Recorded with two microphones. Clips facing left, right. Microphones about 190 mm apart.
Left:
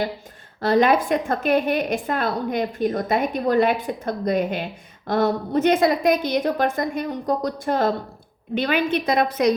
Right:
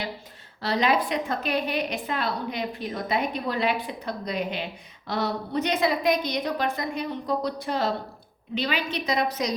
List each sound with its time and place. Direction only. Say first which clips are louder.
0.6 s a woman's voice: left 6 dB; 50° left (ahead or behind)